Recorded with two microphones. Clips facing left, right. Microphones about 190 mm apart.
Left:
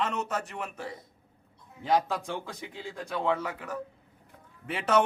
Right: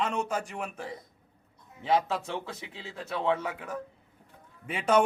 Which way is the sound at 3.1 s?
10° right (ahead or behind).